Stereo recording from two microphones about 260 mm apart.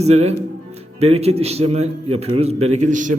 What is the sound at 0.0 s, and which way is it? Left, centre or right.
A man's voice, right.